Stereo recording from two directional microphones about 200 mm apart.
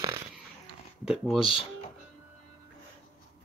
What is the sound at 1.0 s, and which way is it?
Speech, 5° right (ahead or behind).